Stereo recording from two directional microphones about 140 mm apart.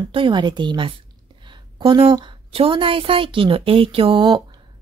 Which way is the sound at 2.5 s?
40° right (ahead or behind).